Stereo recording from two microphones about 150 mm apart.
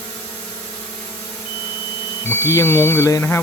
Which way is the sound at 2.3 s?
20° left (ahead or behind).